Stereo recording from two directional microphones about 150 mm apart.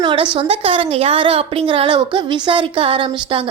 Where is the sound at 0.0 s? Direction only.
35° right (ahead or behind).